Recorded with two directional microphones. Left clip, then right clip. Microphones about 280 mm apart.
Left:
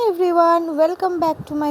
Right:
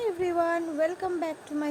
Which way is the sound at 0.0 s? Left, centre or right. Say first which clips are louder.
Left 11 dB; left.